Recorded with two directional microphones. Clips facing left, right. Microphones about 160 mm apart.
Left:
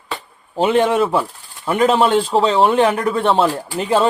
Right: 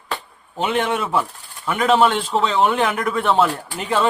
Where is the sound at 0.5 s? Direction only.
35° left (ahead or behind).